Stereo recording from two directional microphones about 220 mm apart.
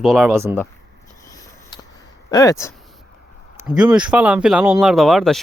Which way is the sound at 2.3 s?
15° left (ahead or behind).